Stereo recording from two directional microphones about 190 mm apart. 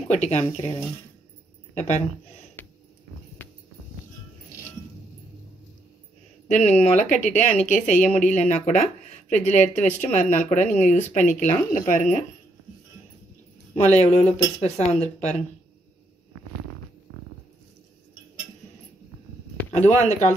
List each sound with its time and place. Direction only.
0.1 s speech: 35° left (ahead or behind)
1.8 s speech: 40° left (ahead or behind)
6.5 s speech: 35° left (ahead or behind)
13.7 s speech: 35° left (ahead or behind)
19.7 s speech: 35° left (ahead or behind)